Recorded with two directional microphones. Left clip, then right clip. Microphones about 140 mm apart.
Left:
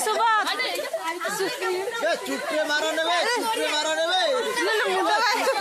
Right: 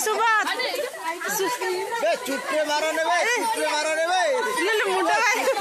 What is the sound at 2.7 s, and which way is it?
Speech, 15° right (ahead or behind).